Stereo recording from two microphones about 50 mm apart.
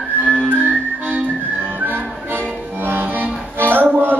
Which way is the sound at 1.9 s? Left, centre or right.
Right.